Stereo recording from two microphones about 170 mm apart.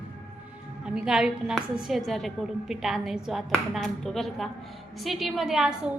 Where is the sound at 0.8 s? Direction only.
5° right (ahead or behind).